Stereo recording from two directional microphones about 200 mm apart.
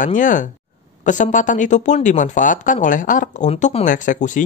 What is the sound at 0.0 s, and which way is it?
Speech, 40° left (ahead or behind).